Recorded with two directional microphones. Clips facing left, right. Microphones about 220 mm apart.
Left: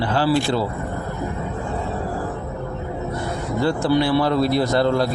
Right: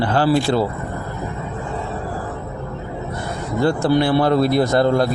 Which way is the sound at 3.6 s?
50° right (ahead or behind).